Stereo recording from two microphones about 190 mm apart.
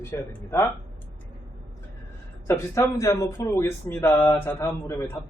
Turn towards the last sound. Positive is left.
turn(degrees=15)  # may be behind; listen again after turning